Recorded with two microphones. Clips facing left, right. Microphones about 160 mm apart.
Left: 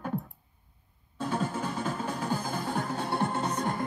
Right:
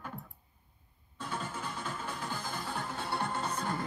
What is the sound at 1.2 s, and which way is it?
Music, 40° left (ahead or behind).